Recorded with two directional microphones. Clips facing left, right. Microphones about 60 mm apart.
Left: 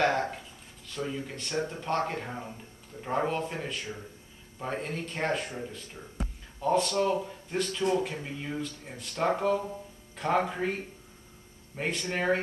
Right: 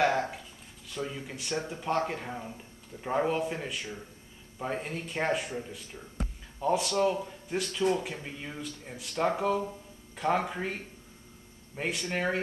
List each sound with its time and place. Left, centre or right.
0.8 s speech: centre
11.7 s speech: centre